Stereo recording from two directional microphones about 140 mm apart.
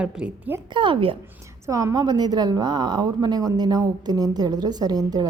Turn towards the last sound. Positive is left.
turn(degrees=-30)  # may be behind; listen again after turning